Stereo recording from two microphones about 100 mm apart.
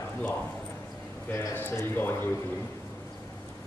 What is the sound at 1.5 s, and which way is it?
Speech, 20° left (ahead or behind).